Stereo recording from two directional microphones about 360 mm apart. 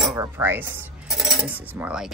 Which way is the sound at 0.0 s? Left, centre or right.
Centre.